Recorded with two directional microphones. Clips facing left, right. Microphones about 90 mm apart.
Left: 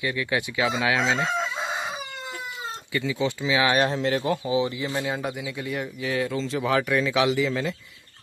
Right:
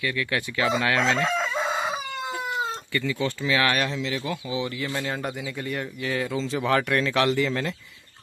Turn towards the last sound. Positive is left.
turn(degrees=0)  # may be behind; listen again after turning